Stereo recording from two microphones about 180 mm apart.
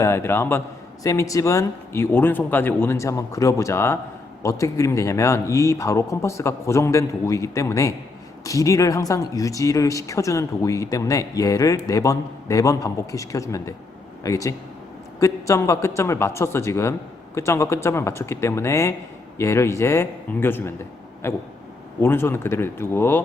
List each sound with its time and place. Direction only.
0.0 s speech: 15° left (ahead or behind)